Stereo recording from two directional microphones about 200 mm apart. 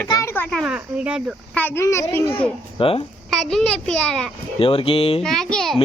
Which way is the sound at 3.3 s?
Centre (ahead or behind).